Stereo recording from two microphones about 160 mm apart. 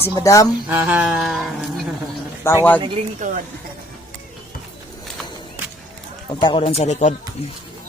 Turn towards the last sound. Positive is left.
turn(degrees=45)  # may be behind; listen again after turning